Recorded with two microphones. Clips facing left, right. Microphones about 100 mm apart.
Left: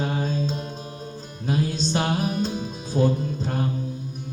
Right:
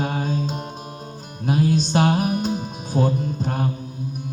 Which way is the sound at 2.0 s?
15° right (ahead or behind).